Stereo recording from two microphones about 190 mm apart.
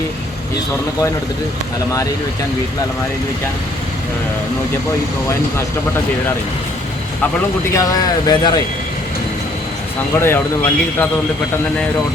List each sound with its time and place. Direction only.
7.7 s speech: 15° left (ahead or behind)
10.2 s speech: 10° left (ahead or behind)